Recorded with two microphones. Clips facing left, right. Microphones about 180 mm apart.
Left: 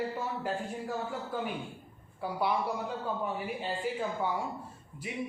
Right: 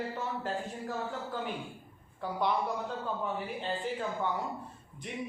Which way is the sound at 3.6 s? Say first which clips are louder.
Left 1 dB; 10° left (ahead or behind).